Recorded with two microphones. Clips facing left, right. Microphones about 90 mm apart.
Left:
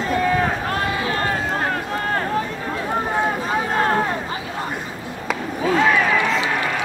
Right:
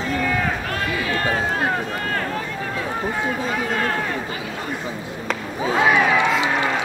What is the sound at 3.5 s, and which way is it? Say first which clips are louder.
Vehicle: left 3 dB; 30° left (ahead or behind).